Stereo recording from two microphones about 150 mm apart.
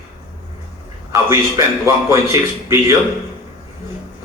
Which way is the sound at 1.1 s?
20° right (ahead or behind).